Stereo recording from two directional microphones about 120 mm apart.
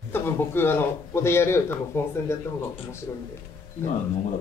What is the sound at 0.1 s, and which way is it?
Speech, 20° left (ahead or behind).